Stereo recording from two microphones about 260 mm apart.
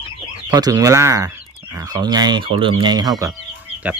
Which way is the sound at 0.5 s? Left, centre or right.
Centre.